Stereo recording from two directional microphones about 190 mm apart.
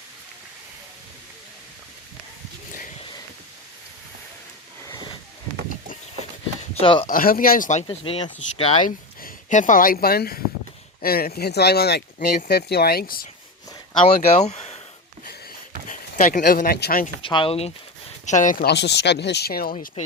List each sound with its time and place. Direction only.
6.7 s speech: 30° left (ahead or behind)
7.1 s speech: 50° left (ahead or behind); by 8.9 s 30° left (ahead or behind)
9.2 s speech: 40° left (ahead or behind)
14.3 s speech: 35° left (ahead or behind)
15.9 s speech: 45° left (ahead or behind)
17.2 s speech: 25° left (ahead or behind)
18.3 s speech: 40° left (ahead or behind)
19.7 s speech: 35° left (ahead or behind)